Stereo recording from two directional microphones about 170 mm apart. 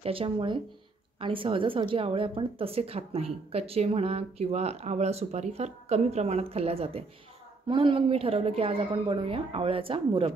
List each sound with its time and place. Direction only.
0.0 s speech: 35° right (ahead or behind)